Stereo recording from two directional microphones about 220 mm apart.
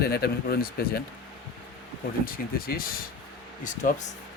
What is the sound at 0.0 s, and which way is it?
Speech, 45° left (ahead or behind).